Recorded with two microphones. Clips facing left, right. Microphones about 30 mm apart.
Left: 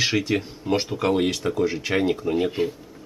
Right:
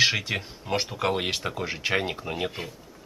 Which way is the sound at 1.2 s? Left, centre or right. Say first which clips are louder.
Left 7 dB; centre.